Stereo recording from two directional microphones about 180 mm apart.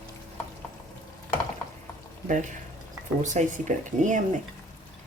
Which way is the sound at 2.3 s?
45° right (ahead or behind).